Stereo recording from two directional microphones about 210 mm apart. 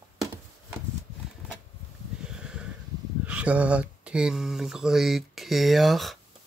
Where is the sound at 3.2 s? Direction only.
5° right (ahead or behind).